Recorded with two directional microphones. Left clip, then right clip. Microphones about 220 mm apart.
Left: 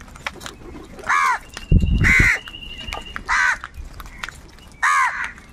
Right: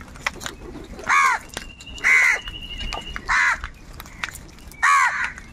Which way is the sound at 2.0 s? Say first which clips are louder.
Even; 35° left (ahead or behind).